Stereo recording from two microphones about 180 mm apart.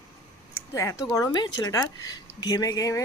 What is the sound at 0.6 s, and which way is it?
Speech, 15° left (ahead or behind).